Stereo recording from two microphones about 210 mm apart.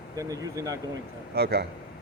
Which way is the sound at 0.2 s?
15° right (ahead or behind).